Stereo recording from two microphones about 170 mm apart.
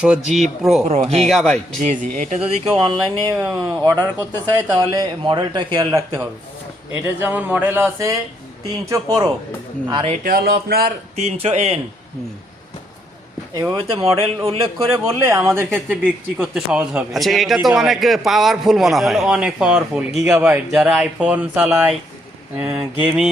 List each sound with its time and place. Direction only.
0.0 s a man's voice: 5° right (ahead or behind)
0.9 s speech: 40° right (ahead or behind)
1.3 s a man's voice: 5° left (ahead or behind)
2.1 s speech: 50° right (ahead or behind)
2.4 s speech: 30° right (ahead or behind)
3.2 s speech: 20° right (ahead or behind)
6.9 s speech: 10° right (ahead or behind)
9.9 s speech: 35° right (ahead or behind)
10.2 s music: 65° right (ahead or behind)
11.2 s speech: 40° right (ahead or behind)
13.5 s speech: 20° right (ahead or behind)
14.0 s speech: 35° right (ahead or behind)
15.2 s a man's voice: 15° right (ahead or behind)